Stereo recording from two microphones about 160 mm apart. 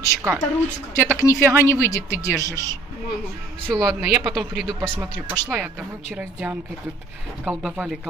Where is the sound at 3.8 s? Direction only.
Centre (ahead or behind).